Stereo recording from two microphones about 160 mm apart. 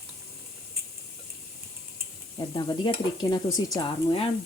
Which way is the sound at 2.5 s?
30° left (ahead or behind).